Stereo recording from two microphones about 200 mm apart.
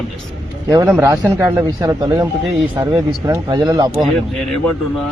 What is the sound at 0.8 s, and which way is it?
Speech, 10° right (ahead or behind).